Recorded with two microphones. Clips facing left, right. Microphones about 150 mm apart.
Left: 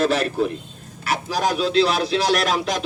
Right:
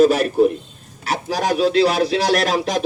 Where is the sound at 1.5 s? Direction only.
45° right (ahead or behind).